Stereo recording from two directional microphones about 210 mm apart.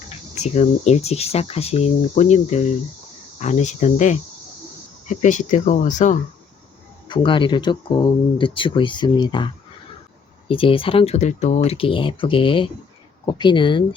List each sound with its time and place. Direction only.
0.4 s speech: 30° left (ahead or behind)
7.1 s speech: 25° left (ahead or behind)
10.5 s speech: 25° left (ahead or behind)